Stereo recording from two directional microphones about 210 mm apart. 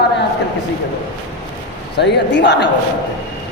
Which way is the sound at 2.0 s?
55° left (ahead or behind).